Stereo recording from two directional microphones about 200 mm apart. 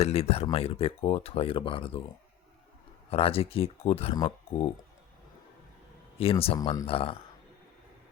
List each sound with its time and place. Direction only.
0.0 s speech: 30° left (ahead or behind)
3.1 s speech: 30° left (ahead or behind)
6.4 s speech: 25° left (ahead or behind)